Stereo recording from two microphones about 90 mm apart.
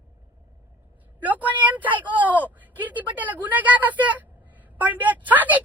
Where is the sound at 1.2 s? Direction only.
20° right (ahead or behind).